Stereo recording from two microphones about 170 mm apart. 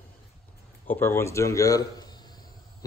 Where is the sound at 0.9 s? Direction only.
15° left (ahead or behind).